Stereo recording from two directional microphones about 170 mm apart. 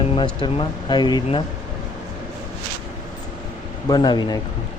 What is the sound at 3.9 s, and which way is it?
Speech, 25° left (ahead or behind).